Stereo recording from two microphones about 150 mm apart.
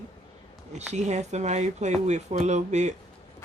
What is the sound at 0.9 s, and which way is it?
Speech, 50° right (ahead or behind).